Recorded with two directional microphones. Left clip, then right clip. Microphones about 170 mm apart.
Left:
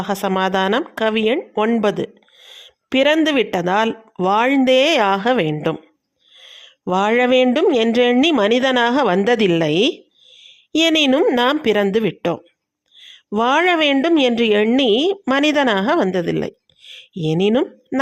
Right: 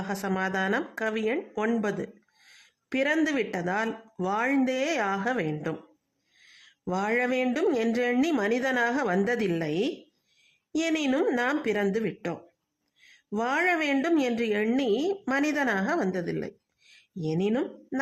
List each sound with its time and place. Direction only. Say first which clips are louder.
0.0 s speech: left 11 dB; 35° left (ahead or behind)